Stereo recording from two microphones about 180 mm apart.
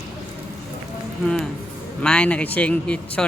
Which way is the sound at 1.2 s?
5° left (ahead or behind).